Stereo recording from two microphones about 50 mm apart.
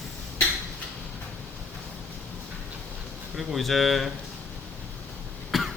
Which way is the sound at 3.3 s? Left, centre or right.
Centre.